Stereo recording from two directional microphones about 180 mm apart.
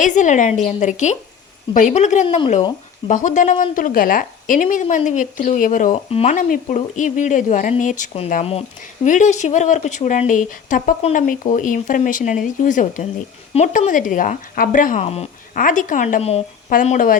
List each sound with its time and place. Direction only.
0.0 s a woman's voice: 45° left (ahead or behind)
2.2 s speech: 30° left (ahead or behind)
3.1 s a woman's voice: 45° left (ahead or behind)
5.9 s speech: 35° left (ahead or behind)
6.3 s a woman's voice: 45° left (ahead or behind)
15.0 s speech: 35° left (ahead or behind)
15.5 s a woman's voice: 45° left (ahead or behind)